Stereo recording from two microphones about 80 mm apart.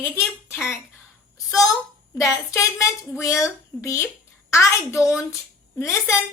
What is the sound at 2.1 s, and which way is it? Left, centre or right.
A woman's voice, left.